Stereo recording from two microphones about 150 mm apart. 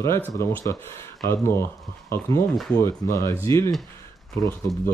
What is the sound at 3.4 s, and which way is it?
A man's voice, 20° left (ahead or behind).